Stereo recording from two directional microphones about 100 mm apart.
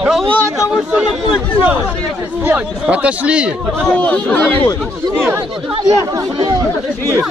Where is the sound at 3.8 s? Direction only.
10° left (ahead or behind).